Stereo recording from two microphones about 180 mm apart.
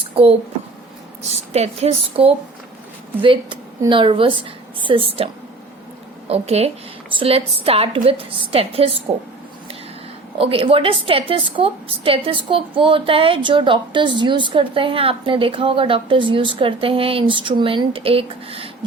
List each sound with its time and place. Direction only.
1.3 s a woman's voice: 35° right (ahead or behind)
10.3 s a woman's voice: 30° right (ahead or behind)